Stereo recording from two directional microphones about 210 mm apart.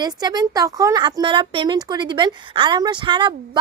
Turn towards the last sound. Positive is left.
turn(degrees=-20)  # may be behind; listen again after turning